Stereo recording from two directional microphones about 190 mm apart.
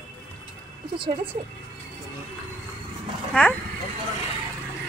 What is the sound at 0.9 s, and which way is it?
Speech, 25° right (ahead or behind).